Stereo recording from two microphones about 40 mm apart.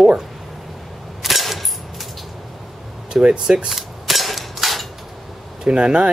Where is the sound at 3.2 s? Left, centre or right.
Right.